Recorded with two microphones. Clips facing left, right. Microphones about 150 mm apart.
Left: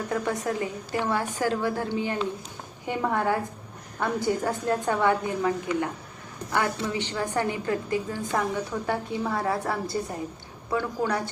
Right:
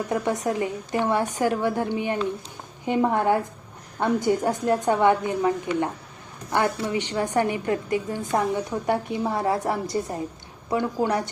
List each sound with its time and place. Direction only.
0.1 s a woman's voice: 20° right (ahead or behind)